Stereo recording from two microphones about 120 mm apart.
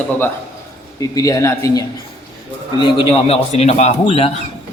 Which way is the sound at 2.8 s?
40° left (ahead or behind).